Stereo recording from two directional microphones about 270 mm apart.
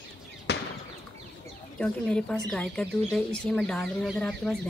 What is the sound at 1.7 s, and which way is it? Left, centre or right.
Speech, centre.